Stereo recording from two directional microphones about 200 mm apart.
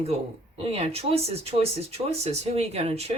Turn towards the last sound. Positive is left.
turn(degrees=-30)  # may be behind; listen again after turning